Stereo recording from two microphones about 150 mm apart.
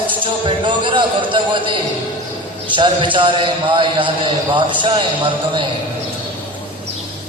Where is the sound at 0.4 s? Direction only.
30° right (ahead or behind).